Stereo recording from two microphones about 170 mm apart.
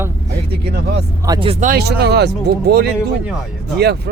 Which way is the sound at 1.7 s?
75° right (ahead or behind).